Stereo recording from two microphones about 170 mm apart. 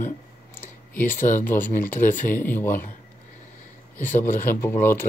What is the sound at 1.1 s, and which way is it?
Speech, 50° left (ahead or behind).